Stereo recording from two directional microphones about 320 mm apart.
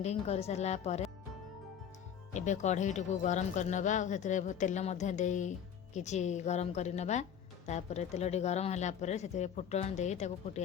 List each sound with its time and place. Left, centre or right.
0.0 s speech: centre
2.3 s speech: left